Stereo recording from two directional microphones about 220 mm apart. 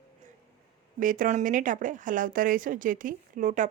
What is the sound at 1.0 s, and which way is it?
Speech, 35° right (ahead or behind).